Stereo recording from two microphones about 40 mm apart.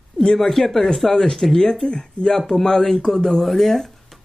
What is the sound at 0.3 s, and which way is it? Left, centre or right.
Speech, centre.